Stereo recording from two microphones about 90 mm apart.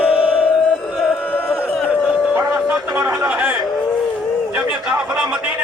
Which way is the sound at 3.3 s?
20° right (ahead or behind).